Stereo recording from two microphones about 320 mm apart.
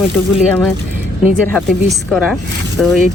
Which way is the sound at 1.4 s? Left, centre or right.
Centre.